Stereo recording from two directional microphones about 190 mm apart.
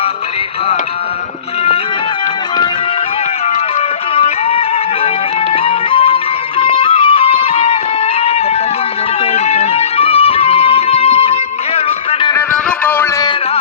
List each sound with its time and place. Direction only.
3.4 s music: 35° left (ahead or behind)
12.3 s music: 10° left (ahead or behind)